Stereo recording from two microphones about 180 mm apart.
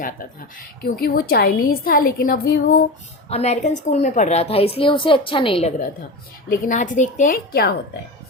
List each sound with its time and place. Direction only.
0.9 s a woman's voice: 55° left (ahead or behind)
3.2 s a woman's voice: 35° left (ahead or behind)
6.5 s a woman's voice: 45° left (ahead or behind)